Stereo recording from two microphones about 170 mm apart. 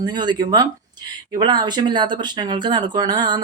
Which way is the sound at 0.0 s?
25° right (ahead or behind).